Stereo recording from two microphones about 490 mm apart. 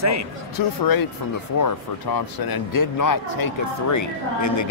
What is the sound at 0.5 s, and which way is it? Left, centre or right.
Speech, left.